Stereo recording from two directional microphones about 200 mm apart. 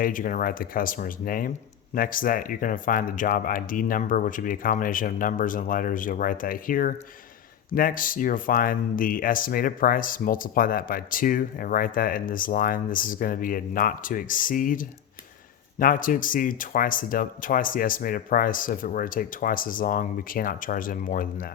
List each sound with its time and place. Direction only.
0.0 s speech: 45° left (ahead or behind)